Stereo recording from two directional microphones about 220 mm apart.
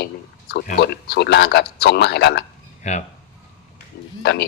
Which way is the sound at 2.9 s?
30° left (ahead or behind).